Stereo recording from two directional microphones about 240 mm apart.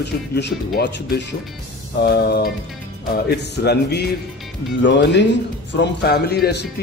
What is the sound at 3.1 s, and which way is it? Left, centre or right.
Speech, left.